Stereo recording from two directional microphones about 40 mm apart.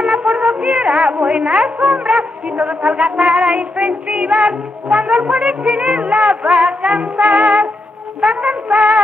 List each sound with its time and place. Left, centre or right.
0.0 s music: right